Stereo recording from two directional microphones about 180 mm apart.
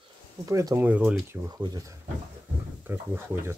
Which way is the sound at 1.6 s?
25° right (ahead or behind).